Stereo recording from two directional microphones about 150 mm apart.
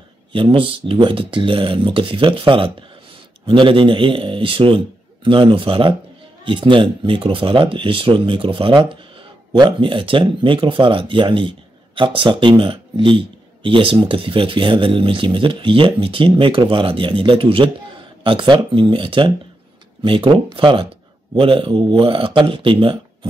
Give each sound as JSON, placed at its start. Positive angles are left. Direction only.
{"t": 0.3, "sound": "speech", "side_deg": -35}